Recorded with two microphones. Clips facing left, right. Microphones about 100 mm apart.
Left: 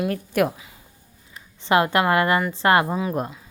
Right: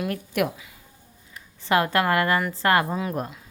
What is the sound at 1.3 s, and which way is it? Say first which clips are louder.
Speech: left 3 dB; 20° left (ahead or behind).